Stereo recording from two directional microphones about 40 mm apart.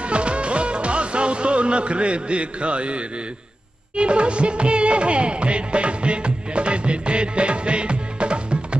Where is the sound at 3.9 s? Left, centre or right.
Right.